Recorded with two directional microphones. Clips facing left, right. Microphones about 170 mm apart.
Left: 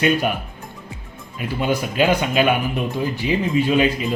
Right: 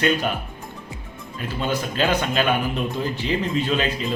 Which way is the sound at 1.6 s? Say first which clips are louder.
Left 4 dB; 10° left (ahead or behind).